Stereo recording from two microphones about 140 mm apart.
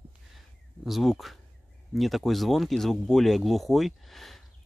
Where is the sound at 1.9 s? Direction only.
Centre (ahead or behind).